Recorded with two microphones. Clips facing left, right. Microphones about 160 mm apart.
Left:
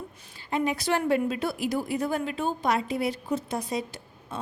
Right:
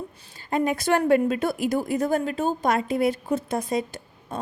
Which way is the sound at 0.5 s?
50° right (ahead or behind).